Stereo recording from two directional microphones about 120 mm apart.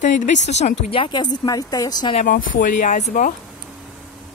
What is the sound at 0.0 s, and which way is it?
Speech, 90° left.